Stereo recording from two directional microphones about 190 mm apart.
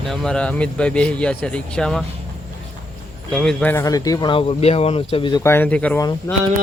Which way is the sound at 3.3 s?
5° left (ahead or behind).